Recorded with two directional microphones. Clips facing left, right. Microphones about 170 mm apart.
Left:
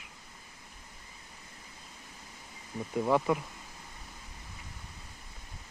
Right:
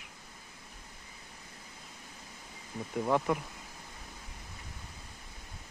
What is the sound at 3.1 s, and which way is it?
Speech, 5° left (ahead or behind).